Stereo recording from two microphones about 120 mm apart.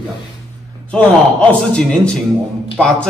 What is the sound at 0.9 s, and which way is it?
A man's voice, 10° left (ahead or behind).